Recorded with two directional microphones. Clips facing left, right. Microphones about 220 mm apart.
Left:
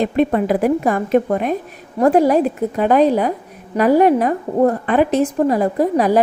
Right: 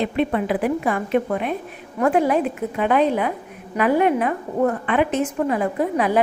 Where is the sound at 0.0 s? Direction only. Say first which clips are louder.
Left 5 dB; 40° left (ahead or behind).